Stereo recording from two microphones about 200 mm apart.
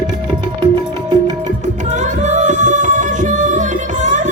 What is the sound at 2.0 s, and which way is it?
Music, 35° right (ahead or behind).